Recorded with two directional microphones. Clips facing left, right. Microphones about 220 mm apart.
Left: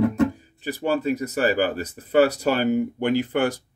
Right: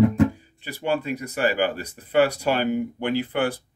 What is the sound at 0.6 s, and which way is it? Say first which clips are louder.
Speech: left 2 dB; 40° left (ahead or behind).